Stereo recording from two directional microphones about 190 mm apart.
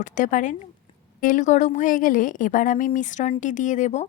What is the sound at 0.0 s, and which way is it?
Speech, 40° left (ahead or behind).